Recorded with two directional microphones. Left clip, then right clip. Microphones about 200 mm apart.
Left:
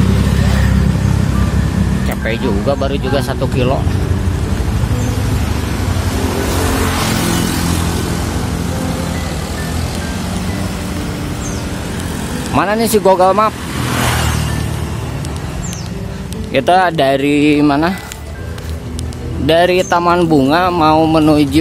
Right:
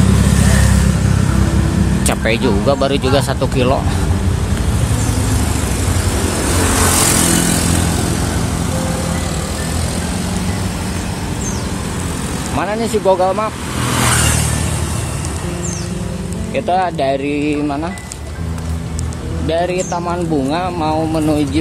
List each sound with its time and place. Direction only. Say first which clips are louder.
2.0 s speech: right 4 dB; 20° right (ahead or behind)
6.9 s vehicle: right 2 dB; 45° right (ahead or behind)
12.5 s speech: left 5 dB; 15° left (ahead or behind)
16.5 s speech: left 5 dB; 30° left (ahead or behind)
19.4 s speech: left 6 dB; 35° left (ahead or behind)